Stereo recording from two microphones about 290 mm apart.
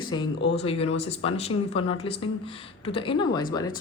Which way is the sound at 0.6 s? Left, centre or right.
Centre.